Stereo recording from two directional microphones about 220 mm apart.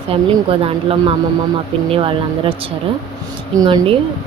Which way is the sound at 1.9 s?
25° right (ahead or behind).